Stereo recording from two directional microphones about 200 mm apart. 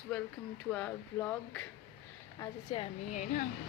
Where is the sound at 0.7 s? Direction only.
5° left (ahead or behind).